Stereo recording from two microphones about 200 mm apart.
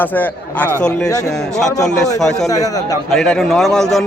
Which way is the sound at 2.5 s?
20° left (ahead or behind).